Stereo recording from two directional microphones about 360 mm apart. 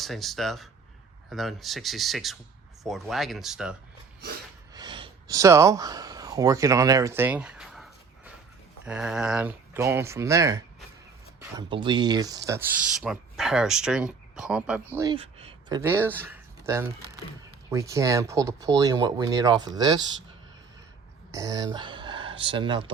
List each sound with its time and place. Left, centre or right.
0.0 s speech: centre
4.7 s a sound: centre
8.9 s speech: centre
21.3 s speech: centre